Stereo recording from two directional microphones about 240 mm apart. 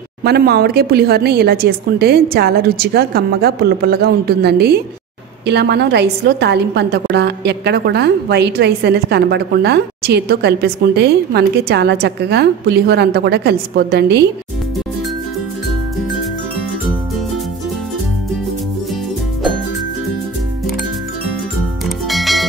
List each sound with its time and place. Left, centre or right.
0.2 s a woman's voice: right
21.8 s music: centre